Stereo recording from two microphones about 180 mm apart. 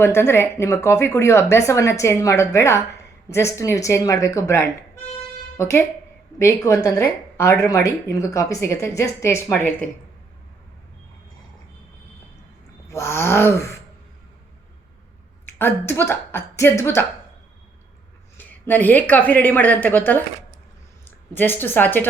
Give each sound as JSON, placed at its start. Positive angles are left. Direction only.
{"t": 0.0, "sound": "speech", "side_deg": 15}
{"t": 12.9, "sound": "speech", "side_deg": 15}
{"t": 15.5, "sound": "speech", "side_deg": 10}
{"t": 18.3, "sound": "speech", "side_deg": 10}
{"t": 21.3, "sound": "speech", "side_deg": 10}